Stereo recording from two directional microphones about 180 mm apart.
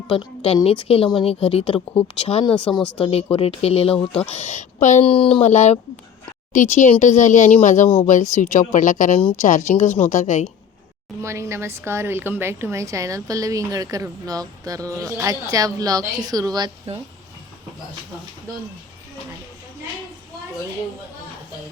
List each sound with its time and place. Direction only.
0.1 s speech: 35° left (ahead or behind)
2.6 s speech: 5° left (ahead or behind)
3.0 s a woman's voice: 35° left (ahead or behind)
11.2 s a woman's voice: 15° right (ahead or behind)